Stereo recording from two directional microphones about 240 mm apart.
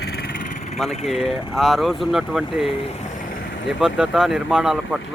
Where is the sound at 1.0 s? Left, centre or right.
Centre.